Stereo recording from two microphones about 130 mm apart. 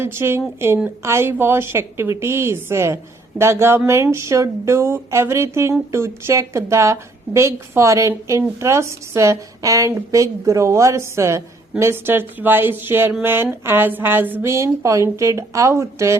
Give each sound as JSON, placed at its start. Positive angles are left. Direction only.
{"t": 0.0, "sound": "a woman's voice", "side_deg": -20}